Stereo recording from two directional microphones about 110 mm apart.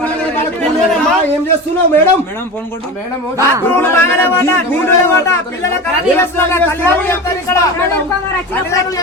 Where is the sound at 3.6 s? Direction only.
20° left (ahead or behind).